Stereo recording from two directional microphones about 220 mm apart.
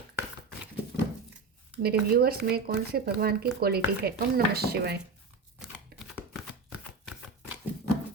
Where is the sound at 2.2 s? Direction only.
45° right (ahead or behind).